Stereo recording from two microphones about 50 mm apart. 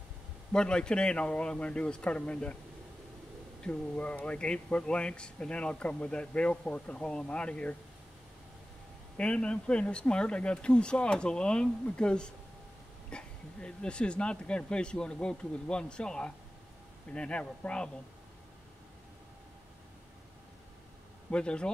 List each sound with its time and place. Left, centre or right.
0.5 s speech: centre
3.6 s speech: left
9.1 s speech: left
21.3 s speech: left